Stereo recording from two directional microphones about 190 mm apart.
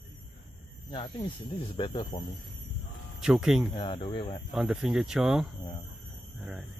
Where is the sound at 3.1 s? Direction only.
5° right (ahead or behind).